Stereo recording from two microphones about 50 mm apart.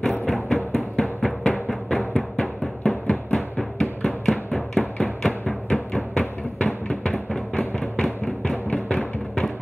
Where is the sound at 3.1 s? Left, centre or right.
Centre.